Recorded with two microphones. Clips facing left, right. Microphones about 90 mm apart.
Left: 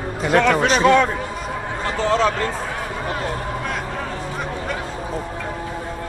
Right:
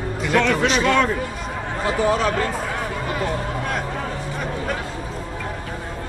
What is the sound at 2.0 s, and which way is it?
Speech, 10° right (ahead or behind).